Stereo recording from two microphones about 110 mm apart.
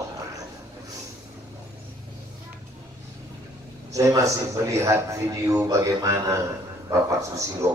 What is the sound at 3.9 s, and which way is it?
A man's voice, 30° right (ahead or behind).